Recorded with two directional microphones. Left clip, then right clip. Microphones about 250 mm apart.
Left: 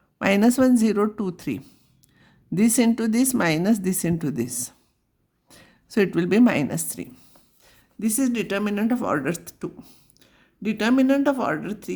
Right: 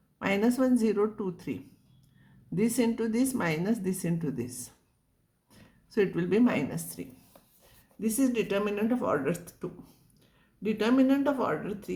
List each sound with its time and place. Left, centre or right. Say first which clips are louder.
0.2 s a woman's voice: left 8 dB; left